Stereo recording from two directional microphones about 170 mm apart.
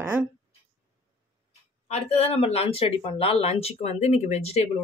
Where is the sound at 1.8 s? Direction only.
40° left (ahead or behind).